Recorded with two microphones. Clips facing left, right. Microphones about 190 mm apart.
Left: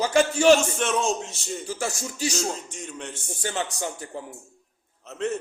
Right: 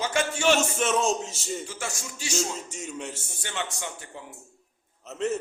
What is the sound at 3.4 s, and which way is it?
Speech, 35° left (ahead or behind).